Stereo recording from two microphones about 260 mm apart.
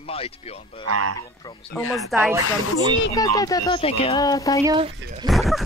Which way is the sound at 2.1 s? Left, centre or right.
Centre.